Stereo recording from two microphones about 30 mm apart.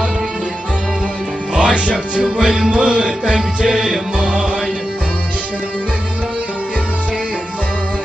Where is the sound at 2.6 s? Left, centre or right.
Right.